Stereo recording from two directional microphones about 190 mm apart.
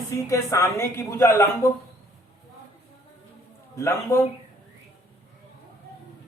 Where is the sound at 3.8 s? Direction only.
15° left (ahead or behind).